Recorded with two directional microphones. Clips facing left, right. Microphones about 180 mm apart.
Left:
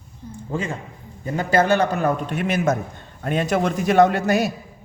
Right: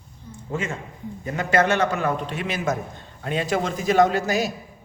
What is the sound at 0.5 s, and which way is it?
A man's voice, 35° left (ahead or behind).